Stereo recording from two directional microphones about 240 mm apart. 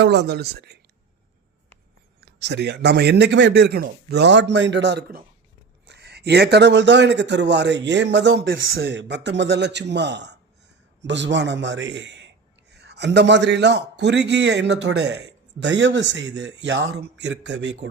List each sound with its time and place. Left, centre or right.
0.0 s a man's voice: right
2.2 s a man's voice: right